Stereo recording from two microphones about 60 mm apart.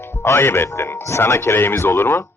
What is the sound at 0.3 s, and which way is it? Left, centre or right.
A man's voice, left.